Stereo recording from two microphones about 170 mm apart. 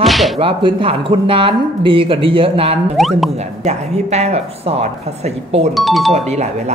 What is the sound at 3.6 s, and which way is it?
Speech, 40° right (ahead or behind).